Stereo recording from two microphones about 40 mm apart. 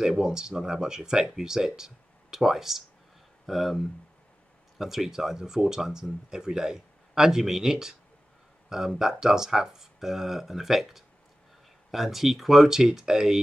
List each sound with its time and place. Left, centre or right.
0.0 s speech: centre